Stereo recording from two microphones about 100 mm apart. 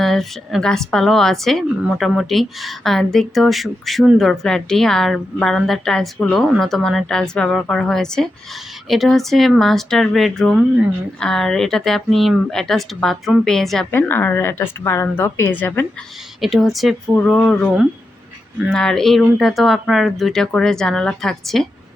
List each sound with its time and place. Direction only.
0.0 s speech: centre (ahead or behind)
14.1 s speech: 20° left (ahead or behind)
16.4 s speech: centre (ahead or behind)
18.7 s speech: 5° left (ahead or behind)